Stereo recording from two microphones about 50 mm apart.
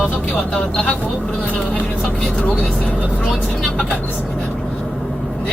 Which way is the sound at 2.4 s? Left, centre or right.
Left.